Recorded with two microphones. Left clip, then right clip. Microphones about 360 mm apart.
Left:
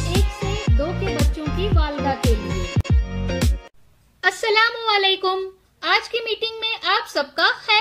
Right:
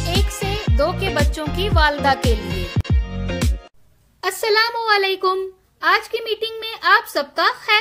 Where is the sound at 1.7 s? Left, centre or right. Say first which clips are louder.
Right 11 dB; right.